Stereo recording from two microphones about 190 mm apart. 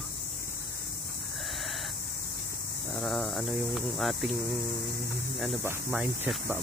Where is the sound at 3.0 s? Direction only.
Centre (ahead or behind).